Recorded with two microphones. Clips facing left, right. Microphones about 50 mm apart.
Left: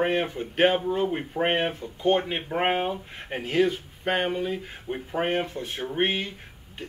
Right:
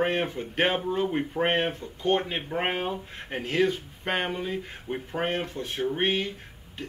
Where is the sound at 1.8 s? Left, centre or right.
Centre.